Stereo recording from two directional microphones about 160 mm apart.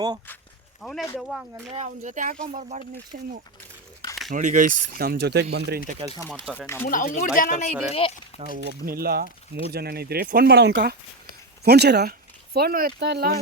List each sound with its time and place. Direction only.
0.8 s speech: 5° left (ahead or behind)
1.7 s speech: 50° right (ahead or behind); by 5.8 s 85° right
6.8 s speech: 55° left (ahead or behind)
7.9 s speech: 35° left (ahead or behind)
8.9 s speech: 70° right (ahead or behind); by 12.1 s 90° right
12.5 s speech: 70° right (ahead or behind)
13.0 s speech: 90° right